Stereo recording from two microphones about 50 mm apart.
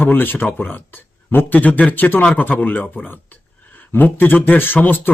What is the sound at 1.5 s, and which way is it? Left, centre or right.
A man's voice, left.